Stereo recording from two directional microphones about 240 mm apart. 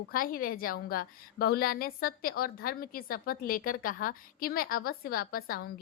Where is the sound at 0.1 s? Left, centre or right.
Left.